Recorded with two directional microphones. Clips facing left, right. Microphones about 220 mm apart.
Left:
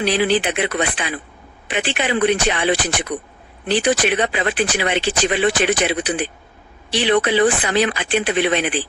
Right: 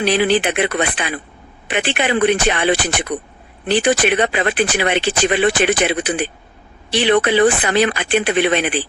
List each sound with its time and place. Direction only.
0.0 s speech: 60° right (ahead or behind)